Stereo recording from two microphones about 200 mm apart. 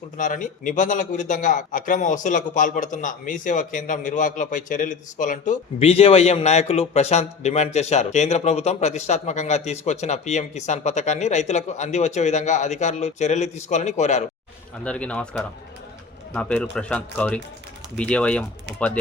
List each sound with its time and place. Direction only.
0.2 s a man's voice: 40° left (ahead or behind)
14.8 s speech: 5° left (ahead or behind)